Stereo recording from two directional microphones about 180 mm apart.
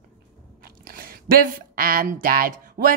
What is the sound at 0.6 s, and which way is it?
Speech, 50° right (ahead or behind).